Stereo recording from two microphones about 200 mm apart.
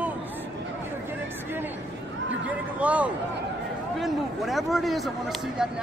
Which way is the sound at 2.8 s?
5° right (ahead or behind).